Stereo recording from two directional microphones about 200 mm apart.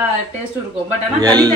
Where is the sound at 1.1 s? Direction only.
20° right (ahead or behind).